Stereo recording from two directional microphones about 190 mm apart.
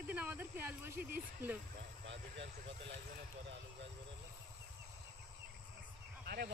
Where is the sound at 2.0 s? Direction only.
70° right (ahead or behind).